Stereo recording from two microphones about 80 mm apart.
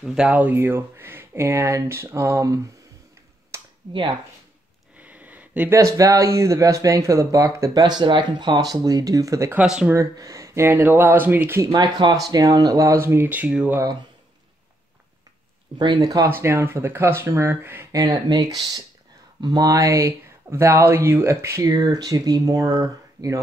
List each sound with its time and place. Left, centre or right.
0.0 s speech: centre
0.3 s speech: centre; by 2.7 s right
4.9 s a sound: centre
5.7 s speech: right
7.7 s speech: right
9.6 s speech: centre
9.9 s speech: right
11.6 s speech: right; by 13.7 s centre
16.0 s speech: right
16.3 s speech: right
17.9 s speech: right
20.0 s speech: right
21.7 s speech: right